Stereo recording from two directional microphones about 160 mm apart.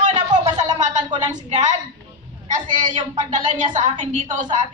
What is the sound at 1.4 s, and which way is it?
Speech, 45° right (ahead or behind).